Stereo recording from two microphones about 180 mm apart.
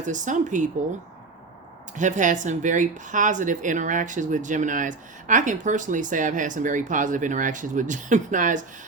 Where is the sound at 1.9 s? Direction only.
45° right (ahead or behind).